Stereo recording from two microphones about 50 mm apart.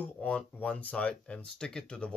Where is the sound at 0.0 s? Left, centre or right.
Left.